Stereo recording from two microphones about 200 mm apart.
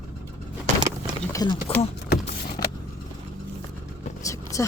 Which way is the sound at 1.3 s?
20° left (ahead or behind).